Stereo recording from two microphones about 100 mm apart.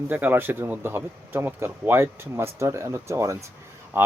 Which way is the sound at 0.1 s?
20° right (ahead or behind).